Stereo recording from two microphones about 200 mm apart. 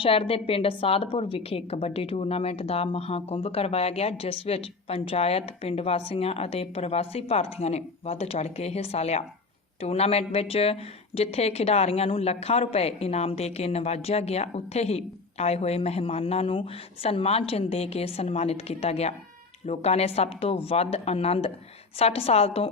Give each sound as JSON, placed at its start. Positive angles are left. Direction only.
{"t": 0.0, "sound": "a woman's voice", "side_deg": 25}